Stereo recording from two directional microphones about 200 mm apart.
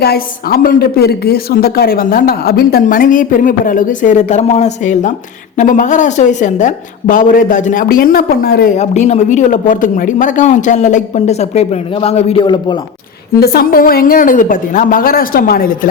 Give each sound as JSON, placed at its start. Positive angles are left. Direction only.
{"t": 0.0, "sound": "a woman's voice", "side_deg": 50}
{"t": 8.8, "sound": "a man's voice", "side_deg": 35}
{"t": 13.4, "sound": "a woman's voice", "side_deg": 50}